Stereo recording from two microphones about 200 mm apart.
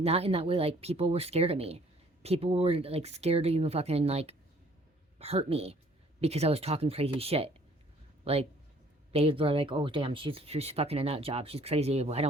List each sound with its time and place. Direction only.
0.0 s speech: 30° right (ahead or behind)